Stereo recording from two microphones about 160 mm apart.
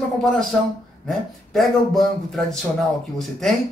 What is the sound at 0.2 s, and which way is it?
Speech, centre (ahead or behind).